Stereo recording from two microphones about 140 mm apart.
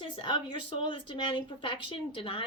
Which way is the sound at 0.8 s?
35° left (ahead or behind).